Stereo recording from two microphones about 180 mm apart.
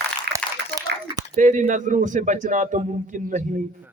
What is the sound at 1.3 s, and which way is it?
A man's voice, 45° right (ahead or behind).